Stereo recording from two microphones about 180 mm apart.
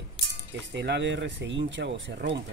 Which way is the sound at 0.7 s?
75° right (ahead or behind).